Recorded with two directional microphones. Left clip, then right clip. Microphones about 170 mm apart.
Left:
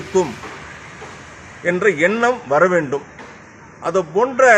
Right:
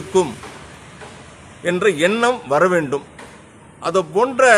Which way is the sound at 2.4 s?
10° right (ahead or behind).